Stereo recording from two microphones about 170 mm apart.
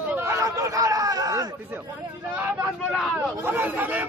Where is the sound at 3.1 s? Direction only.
10° right (ahead or behind).